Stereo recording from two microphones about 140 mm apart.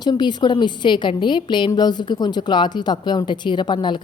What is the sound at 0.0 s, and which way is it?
A woman's voice, 30° left (ahead or behind).